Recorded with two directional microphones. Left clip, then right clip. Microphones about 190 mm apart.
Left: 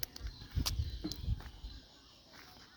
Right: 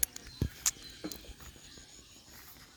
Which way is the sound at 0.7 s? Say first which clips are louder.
Right 7 dB; 40° left (ahead or behind).